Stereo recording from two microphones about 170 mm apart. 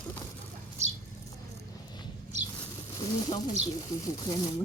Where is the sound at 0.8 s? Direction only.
40° right (ahead or behind).